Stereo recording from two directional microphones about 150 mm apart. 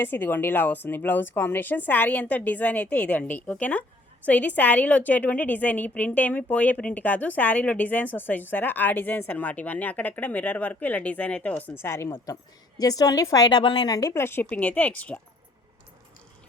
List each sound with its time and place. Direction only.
0.0 s a woman's voice: 15° left (ahead or behind)